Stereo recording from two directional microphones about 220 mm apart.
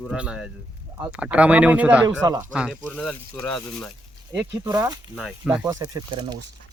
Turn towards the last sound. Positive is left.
turn(degrees=-15)  # may be behind; listen again after turning